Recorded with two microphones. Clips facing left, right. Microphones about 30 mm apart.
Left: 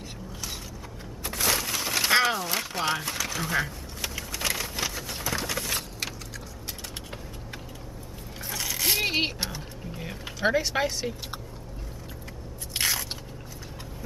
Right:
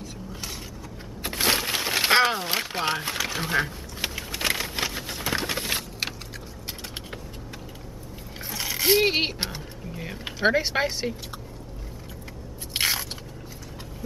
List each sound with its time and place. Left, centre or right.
1.2 s a sound: right
8.5 s coin: centre
10.4 s speech: centre
12.7 s biting: right